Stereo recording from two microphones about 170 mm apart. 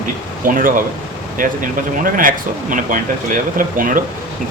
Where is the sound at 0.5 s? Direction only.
55° right (ahead or behind).